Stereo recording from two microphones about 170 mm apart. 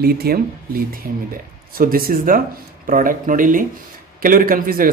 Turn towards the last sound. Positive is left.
turn(degrees=-55)  # may be behind; listen again after turning